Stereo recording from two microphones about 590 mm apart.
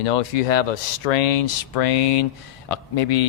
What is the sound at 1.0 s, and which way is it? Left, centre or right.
Speech, left.